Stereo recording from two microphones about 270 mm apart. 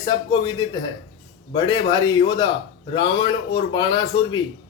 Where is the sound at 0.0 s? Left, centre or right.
Centre.